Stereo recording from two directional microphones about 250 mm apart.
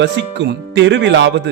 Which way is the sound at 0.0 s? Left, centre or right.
Right.